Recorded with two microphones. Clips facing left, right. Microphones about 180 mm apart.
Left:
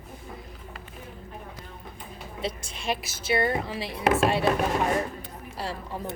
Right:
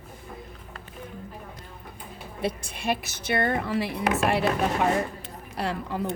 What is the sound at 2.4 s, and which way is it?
Speech, 60° right (ahead or behind).